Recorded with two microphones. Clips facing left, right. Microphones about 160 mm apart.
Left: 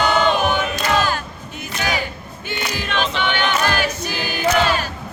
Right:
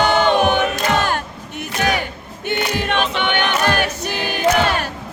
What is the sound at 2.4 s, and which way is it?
Choir, 60° right (ahead or behind).